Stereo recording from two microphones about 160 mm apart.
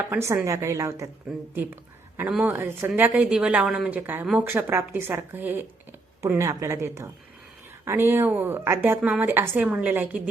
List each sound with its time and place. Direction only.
0.1 s a woman's voice: 15° right (ahead or behind)